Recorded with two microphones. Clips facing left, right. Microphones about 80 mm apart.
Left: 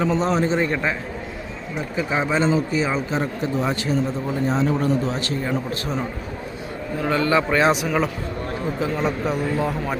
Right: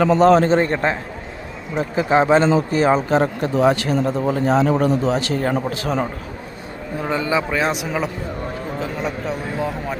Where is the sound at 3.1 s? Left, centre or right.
Right.